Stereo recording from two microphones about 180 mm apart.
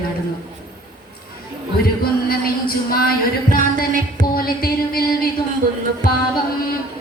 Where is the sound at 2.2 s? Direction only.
55° left (ahead or behind).